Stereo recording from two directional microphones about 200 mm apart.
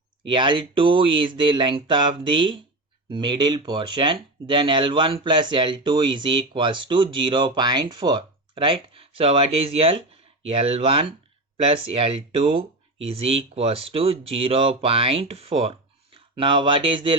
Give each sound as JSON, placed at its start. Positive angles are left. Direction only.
{"t": 0.3, "sound": "speech", "side_deg": -25}